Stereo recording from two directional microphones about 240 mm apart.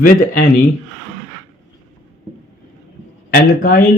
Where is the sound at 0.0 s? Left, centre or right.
Left.